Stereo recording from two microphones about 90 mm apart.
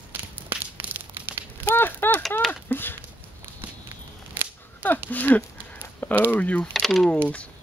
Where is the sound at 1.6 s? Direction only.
25° left (ahead or behind).